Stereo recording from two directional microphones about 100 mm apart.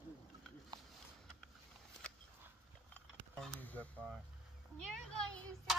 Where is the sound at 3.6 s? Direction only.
15° left (ahead or behind).